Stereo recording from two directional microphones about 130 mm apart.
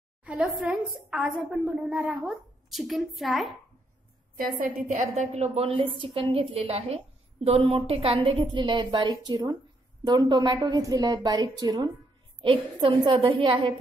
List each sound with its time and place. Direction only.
0.2 s a woman's voice: 10° right (ahead or behind)
4.4 s a woman's voice: 85° right; by 11.9 s 30° right (ahead or behind)
12.4 s a woman's voice: 40° right (ahead or behind)